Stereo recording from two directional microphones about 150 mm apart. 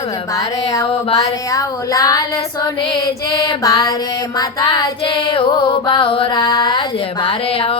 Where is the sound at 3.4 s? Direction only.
25° left (ahead or behind).